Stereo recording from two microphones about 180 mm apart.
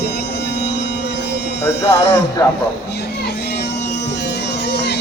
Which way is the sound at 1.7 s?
15° left (ahead or behind).